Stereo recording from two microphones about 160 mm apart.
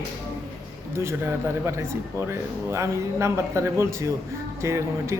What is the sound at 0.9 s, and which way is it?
Speech, 15° right (ahead or behind).